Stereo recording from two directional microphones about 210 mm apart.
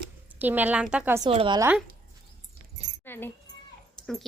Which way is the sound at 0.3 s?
10° right (ahead or behind).